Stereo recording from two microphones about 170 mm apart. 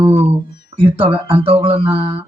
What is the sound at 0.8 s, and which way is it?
Speech, 30° right (ahead or behind).